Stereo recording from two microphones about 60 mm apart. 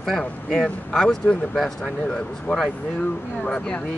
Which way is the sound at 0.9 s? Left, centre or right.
Centre.